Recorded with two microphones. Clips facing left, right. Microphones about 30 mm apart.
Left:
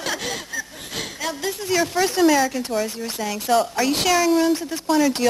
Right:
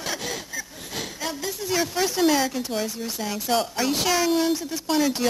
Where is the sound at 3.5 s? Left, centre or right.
Centre.